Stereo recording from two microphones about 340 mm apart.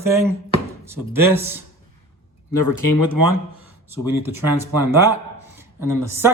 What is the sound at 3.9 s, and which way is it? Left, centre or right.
Speech, centre.